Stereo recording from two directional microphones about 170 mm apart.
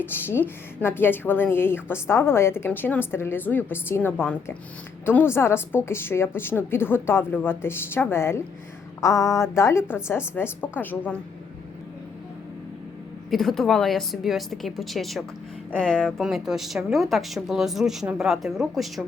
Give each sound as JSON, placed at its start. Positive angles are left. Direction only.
{"t": 0.0, "sound": "speech", "side_deg": 10}
{"t": 13.3, "sound": "a woman's voice", "side_deg": 0}